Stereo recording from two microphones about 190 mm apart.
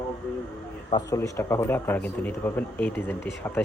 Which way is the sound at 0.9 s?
15° left (ahead or behind).